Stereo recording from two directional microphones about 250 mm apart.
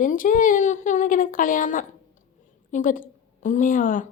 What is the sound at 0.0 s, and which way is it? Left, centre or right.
A woman's voice, left.